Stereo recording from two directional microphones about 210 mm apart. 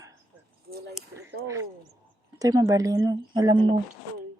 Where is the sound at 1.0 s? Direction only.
Centre (ahead or behind).